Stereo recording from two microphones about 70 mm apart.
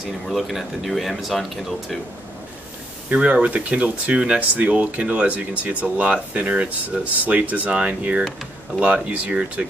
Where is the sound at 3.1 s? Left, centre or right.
Centre.